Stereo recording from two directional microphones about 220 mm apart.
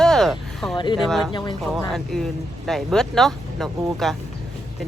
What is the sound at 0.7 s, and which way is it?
Speech, 20° left (ahead or behind).